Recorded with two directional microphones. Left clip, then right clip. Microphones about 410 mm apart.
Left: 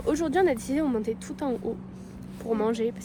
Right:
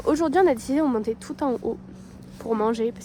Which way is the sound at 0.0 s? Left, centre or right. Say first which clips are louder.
Right 4 dB; centre.